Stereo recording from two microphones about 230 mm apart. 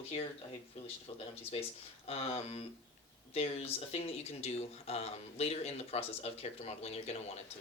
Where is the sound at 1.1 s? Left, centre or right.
Left.